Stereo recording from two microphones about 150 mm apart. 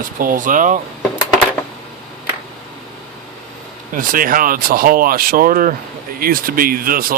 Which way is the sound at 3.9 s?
65° right (ahead or behind).